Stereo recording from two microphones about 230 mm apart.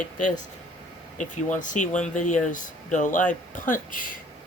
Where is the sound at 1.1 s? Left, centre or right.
Left.